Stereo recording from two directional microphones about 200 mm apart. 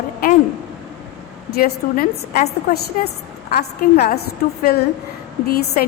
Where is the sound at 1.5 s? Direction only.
50° left (ahead or behind).